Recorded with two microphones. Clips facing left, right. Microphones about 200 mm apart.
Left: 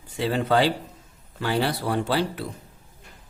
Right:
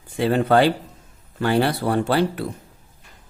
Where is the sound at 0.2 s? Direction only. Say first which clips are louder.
Right 5 dB; 55° right (ahead or behind).